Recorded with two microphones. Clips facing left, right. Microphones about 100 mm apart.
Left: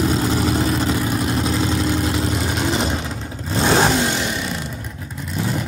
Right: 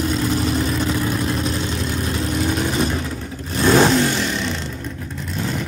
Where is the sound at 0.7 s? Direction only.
5° left (ahead or behind).